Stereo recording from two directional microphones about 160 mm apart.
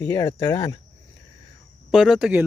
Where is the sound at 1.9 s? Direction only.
5° right (ahead or behind).